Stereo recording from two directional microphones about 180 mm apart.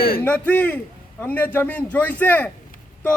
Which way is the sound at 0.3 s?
10° left (ahead or behind).